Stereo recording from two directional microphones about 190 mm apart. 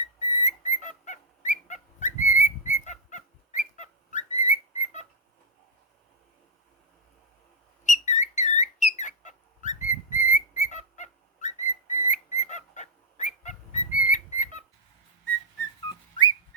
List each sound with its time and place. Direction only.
0.2 s whistling: 40° left (ahead or behind)
7.9 s whistle: 40° left (ahead or behind)